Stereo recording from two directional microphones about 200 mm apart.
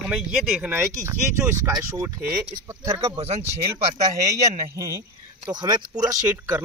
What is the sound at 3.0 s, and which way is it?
Speech, 30° right (ahead or behind).